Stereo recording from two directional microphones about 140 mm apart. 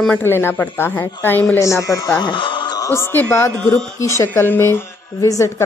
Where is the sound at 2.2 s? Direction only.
35° left (ahead or behind).